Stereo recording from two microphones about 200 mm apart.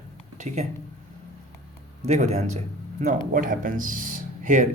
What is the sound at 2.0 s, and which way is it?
Speech, 35° right (ahead or behind).